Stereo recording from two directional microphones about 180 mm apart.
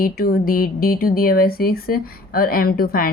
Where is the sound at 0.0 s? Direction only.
55° left (ahead or behind).